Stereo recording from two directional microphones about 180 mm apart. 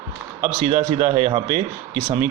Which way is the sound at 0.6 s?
40° right (ahead or behind).